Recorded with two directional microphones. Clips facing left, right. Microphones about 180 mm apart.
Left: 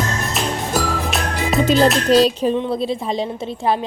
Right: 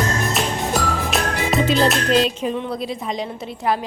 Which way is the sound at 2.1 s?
35° left (ahead or behind).